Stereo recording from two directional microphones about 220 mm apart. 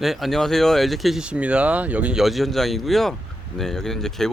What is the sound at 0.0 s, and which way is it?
Speech, centre (ahead or behind).